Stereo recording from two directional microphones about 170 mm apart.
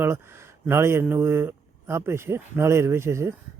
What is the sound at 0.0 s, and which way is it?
Speech, 15° right (ahead or behind).